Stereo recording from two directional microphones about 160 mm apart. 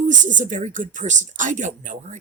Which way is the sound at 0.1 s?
50° right (ahead or behind).